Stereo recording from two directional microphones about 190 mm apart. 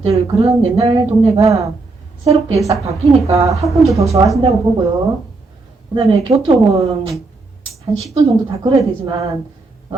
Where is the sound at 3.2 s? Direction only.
15° right (ahead or behind).